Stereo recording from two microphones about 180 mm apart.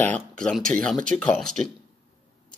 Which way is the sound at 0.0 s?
5° left (ahead or behind).